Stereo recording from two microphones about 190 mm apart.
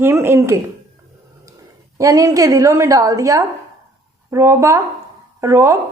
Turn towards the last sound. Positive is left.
turn(degrees=-15)  # may be behind; listen again after turning